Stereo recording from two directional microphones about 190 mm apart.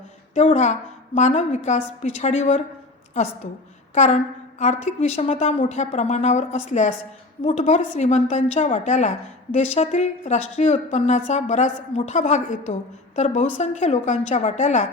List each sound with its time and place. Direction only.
0.3 s a woman's voice: 35° left (ahead or behind)
3.9 s a woman's voice: 40° left (ahead or behind)